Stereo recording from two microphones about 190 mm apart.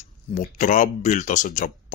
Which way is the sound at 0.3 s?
40° left (ahead or behind).